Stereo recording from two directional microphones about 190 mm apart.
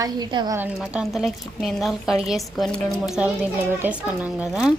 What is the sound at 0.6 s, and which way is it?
A woman's voice, 5° right (ahead or behind).